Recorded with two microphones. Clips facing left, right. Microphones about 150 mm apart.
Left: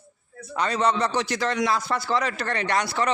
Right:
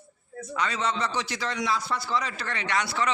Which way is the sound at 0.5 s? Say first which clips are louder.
Left 5 dB; 40° left (ahead or behind).